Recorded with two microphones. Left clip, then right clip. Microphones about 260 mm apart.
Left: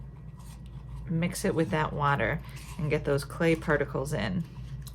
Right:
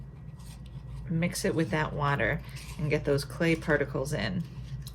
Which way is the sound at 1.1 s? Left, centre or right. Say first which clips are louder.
Even; left.